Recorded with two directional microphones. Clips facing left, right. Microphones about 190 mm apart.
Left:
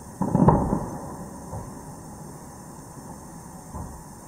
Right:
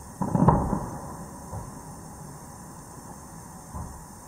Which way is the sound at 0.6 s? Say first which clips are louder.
Left 3 dB; 25° left (ahead or behind).